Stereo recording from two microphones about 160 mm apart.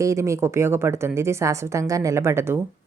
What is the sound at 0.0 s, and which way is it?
A woman's voice, 20° right (ahead or behind).